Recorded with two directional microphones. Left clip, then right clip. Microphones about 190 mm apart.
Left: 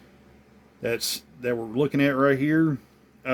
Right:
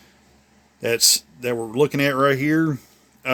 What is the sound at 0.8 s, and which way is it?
Speech, 60° right (ahead or behind).